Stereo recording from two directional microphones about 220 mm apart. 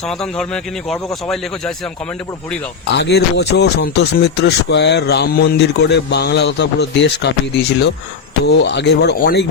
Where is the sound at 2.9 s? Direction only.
50° left (ahead or behind).